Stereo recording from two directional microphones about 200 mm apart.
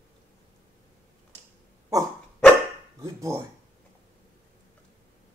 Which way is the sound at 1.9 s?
15° right (ahead or behind).